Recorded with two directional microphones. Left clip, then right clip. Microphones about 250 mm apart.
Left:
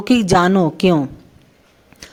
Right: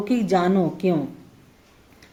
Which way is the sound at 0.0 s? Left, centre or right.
Left.